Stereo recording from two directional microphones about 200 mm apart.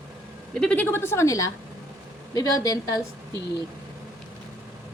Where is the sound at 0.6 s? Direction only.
5° left (ahead or behind).